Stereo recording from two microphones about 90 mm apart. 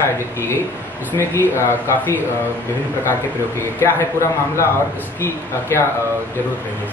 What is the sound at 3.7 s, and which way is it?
Speech, 25° left (ahead or behind).